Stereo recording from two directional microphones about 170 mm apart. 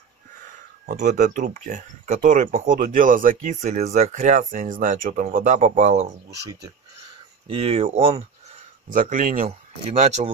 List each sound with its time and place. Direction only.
0.5 s speech: 45° right (ahead or behind)
7.4 s speech: 35° right (ahead or behind)
8.8 s speech: 50° right (ahead or behind)